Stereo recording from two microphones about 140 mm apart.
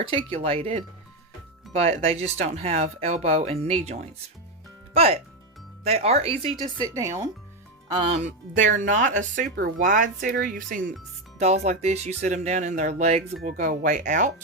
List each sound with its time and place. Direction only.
0.0 s speech: 40° right (ahead or behind)
6.7 s speech: 25° right (ahead or behind)
8.1 s speech: 60° right (ahead or behind); by 10.9 s 75° right (ahead or behind)
11.3 s speech: 50° right (ahead or behind)
13.4 s speech: 70° right (ahead or behind)